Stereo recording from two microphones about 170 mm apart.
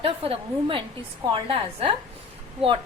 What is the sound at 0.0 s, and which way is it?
A woman's voice, 30° right (ahead or behind).